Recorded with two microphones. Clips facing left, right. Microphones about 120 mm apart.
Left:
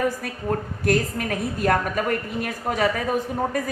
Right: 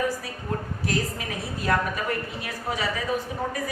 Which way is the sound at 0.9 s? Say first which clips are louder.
Left 7 dB; 55° left (ahead or behind).